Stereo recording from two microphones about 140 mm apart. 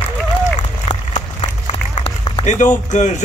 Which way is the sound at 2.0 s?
50° left (ahead or behind).